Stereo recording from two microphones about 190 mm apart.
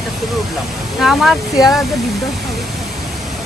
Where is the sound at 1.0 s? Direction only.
Centre (ahead or behind).